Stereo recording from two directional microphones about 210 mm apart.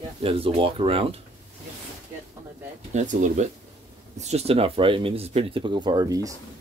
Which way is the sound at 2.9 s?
35° right (ahead or behind).